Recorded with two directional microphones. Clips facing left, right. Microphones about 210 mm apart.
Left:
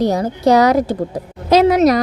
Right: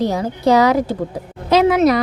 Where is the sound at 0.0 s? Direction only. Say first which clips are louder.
Left 2 dB; 45° left (ahead or behind).